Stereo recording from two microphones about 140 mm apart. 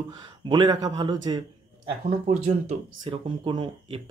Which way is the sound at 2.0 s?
60° right (ahead or behind).